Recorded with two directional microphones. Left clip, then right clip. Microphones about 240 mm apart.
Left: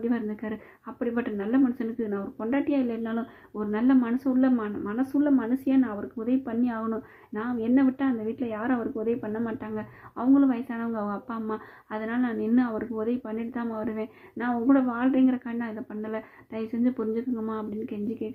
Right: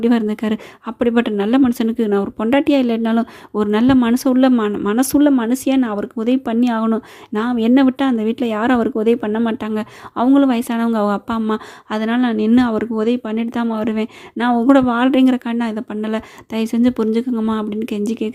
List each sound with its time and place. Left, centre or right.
0.0 s a woman's voice: right